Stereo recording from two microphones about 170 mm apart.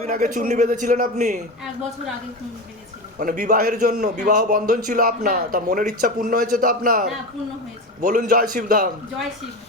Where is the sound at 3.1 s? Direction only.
55° right (ahead or behind).